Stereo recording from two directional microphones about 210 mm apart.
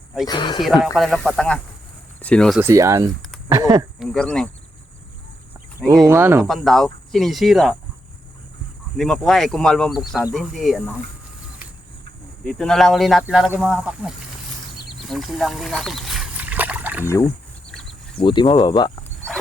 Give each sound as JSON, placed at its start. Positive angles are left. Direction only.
{"t": 0.3, "sound": "speech", "side_deg": 20}
{"t": 0.6, "sound": "speech", "side_deg": 0}
{"t": 2.6, "sound": "speech", "side_deg": -15}
{"t": 4.0, "sound": "speech", "side_deg": 5}
{"t": 5.8, "sound": "speech", "side_deg": 0}
{"t": 6.1, "sound": "speech", "side_deg": -15}
{"t": 6.5, "sound": "speech", "side_deg": 0}
{"t": 9.0, "sound": "speech", "side_deg": 0}
{"t": 12.5, "sound": "speech", "side_deg": 0}
{"t": 14.8, "sound": "a sound", "side_deg": 0}
{"t": 17.1, "sound": "speech", "side_deg": 15}
{"t": 17.7, "sound": "a sound", "side_deg": 5}
{"t": 18.2, "sound": "speech", "side_deg": 25}